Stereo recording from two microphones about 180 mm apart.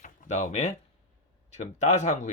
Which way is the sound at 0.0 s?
40° left (ahead or behind).